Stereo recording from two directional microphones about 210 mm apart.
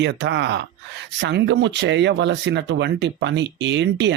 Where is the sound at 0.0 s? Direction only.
55° right (ahead or behind).